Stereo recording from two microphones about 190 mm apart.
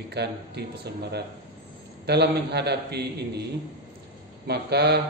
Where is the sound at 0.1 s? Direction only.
60° right (ahead or behind).